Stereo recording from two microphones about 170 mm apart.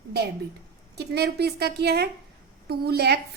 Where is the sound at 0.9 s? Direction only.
75° right (ahead or behind).